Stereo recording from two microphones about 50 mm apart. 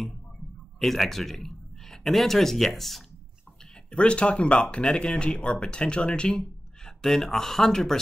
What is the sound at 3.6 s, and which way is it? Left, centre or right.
Speech, centre.